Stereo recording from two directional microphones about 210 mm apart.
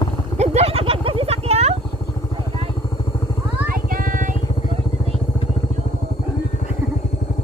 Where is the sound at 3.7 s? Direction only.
40° right (ahead or behind).